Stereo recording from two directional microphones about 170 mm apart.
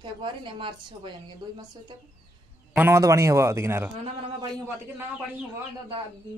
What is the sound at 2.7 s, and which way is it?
A man's voice, 15° right (ahead or behind).